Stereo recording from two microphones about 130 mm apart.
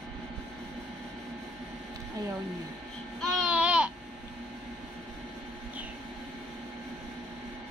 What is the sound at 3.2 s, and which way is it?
Babbling, 10° right (ahead or behind).